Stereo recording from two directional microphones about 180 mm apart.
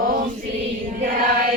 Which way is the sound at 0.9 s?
55° right (ahead or behind).